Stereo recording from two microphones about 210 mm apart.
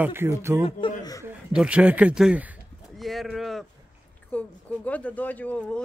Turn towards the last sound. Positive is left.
turn(degrees=5)  # may be behind; listen again after turning